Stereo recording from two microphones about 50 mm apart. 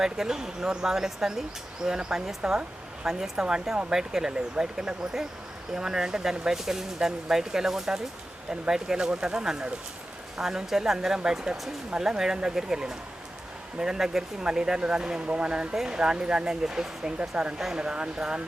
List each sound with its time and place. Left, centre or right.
0.0 s speech: centre
15.7 s speech: centre